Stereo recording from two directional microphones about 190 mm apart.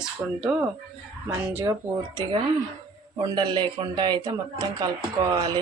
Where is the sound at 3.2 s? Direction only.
25° right (ahead or behind).